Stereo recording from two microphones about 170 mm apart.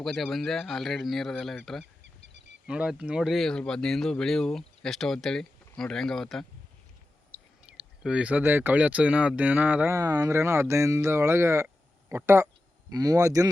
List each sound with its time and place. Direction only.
0.0 s speech: centre (ahead or behind)
1.8 s goose: 90° right
2.6 s speech: 5° right (ahead or behind)
7.7 s speech: 5° right (ahead or behind)